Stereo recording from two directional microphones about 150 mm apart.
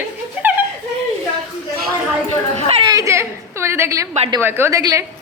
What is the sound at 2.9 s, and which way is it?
A woman's voice, 20° right (ahead or behind).